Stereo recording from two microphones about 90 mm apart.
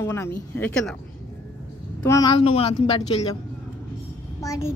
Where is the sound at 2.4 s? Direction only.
90° left.